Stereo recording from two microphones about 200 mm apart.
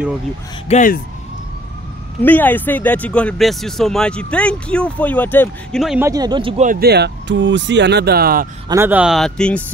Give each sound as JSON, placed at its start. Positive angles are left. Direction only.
{"t": 0.7, "sound": "speech", "side_deg": 40}
{"t": 2.2, "sound": "speech", "side_deg": 10}
{"t": 5.9, "sound": "speech", "side_deg": -15}
{"t": 6.6, "sound": "speech", "side_deg": -45}
{"t": 8.6, "sound": "speech", "side_deg": -10}